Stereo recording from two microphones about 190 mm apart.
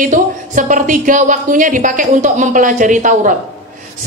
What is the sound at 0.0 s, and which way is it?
A woman's voice, 45° right (ahead or behind).